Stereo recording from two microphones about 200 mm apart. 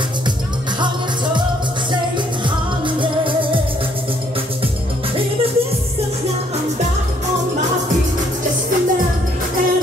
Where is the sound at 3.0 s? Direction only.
25° right (ahead or behind).